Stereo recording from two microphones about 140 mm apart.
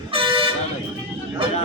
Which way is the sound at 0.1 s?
40° right (ahead or behind).